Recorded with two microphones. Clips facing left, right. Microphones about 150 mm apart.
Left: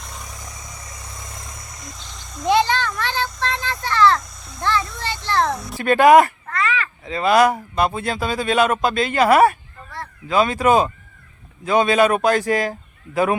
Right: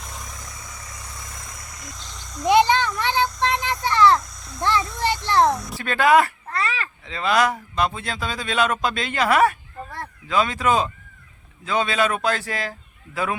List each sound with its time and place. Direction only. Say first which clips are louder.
2.4 s child singing: right 1 dB; 15° right (ahead or behind)
4.6 s a sound: right 1 dB; 20° right (ahead or behind)
5.9 s speech: left 6 dB; 20° left (ahead or behind)
6.5 s babbling: left 3 dB; 35° right (ahead or behind)
7.0 s speech: left 5 dB; 40° left (ahead or behind)
11.9 s speech: left 7 dB; 45° left (ahead or behind)